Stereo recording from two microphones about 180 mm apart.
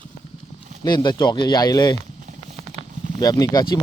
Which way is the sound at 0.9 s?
25° left (ahead or behind).